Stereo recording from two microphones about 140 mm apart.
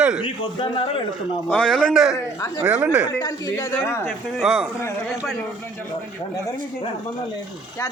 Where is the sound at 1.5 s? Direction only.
5° left (ahead or behind); by 3.1 s 10° right (ahead or behind).